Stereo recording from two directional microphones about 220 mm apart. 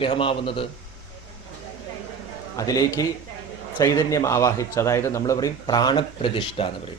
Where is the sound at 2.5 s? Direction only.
15° left (ahead or behind).